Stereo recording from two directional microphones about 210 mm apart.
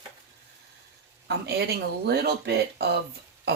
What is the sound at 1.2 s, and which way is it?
Speech, 50° right (ahead or behind).